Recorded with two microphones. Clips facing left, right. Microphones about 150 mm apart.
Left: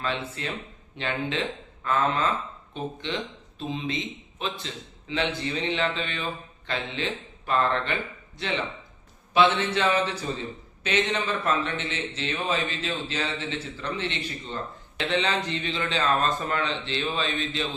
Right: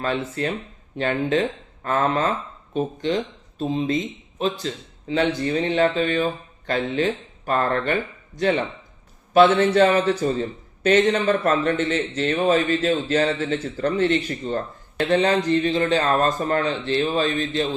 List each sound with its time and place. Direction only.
0.0 s a man's voice: 45° right (ahead or behind)